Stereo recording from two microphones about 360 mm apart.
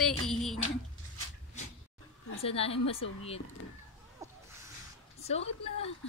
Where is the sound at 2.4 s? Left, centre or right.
Centre.